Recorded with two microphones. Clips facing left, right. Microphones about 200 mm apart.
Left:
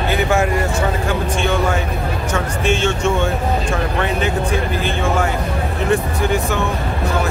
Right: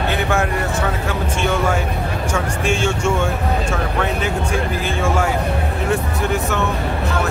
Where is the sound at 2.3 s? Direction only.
10° right (ahead or behind).